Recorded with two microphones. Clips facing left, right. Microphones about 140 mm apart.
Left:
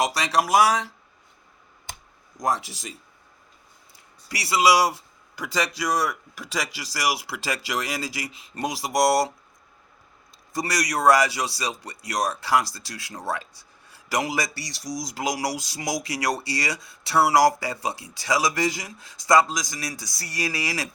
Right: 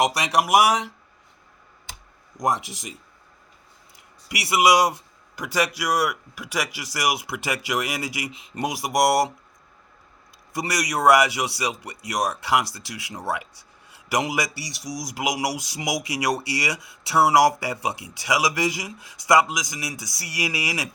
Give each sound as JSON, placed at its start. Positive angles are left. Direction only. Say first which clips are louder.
{"t": 0.0, "sound": "speech", "louder": "right 2 dB", "side_deg": -15}
{"t": 2.4, "sound": "speech", "louder": "right 1 dB", "side_deg": -20}
{"t": 10.5, "sound": "speech", "louder": "even", "side_deg": -15}